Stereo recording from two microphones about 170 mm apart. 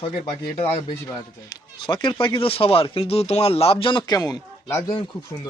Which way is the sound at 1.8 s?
25° left (ahead or behind).